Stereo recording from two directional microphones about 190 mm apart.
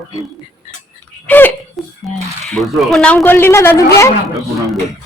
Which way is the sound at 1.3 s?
10° left (ahead or behind).